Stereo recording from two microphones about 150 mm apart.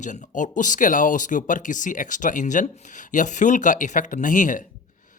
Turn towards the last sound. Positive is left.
turn(degrees=60)  # may be behind; listen again after turning